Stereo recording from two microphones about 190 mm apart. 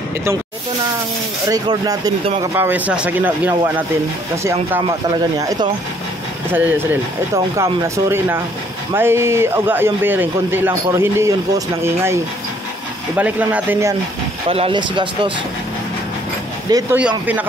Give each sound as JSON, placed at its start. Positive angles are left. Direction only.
{"t": 1.5, "sound": "a man's voice", "side_deg": -20}
{"t": 14.5, "sound": "speech", "side_deg": -30}
{"t": 16.7, "sound": "speech", "side_deg": -20}